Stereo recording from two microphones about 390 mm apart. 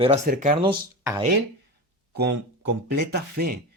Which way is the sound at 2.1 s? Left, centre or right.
Right.